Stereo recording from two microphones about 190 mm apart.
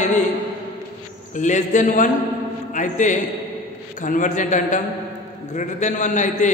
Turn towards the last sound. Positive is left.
turn(degrees=40)  # may be behind; listen again after turning